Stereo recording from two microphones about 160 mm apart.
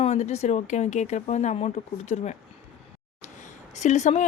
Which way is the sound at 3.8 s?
50° left (ahead or behind).